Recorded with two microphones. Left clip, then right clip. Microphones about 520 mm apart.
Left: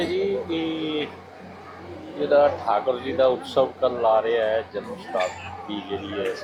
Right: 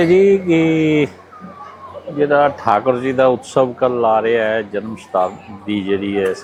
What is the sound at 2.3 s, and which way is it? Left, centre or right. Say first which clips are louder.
Speech: right 4 dB; right.